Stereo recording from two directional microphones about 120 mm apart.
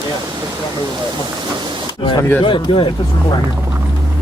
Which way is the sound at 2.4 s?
45° left (ahead or behind).